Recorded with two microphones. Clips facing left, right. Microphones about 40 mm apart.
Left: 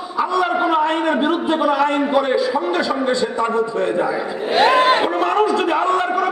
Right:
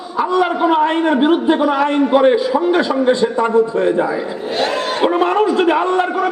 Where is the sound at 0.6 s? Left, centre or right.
Centre.